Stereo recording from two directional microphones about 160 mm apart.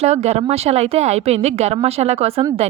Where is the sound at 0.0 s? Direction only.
40° right (ahead or behind).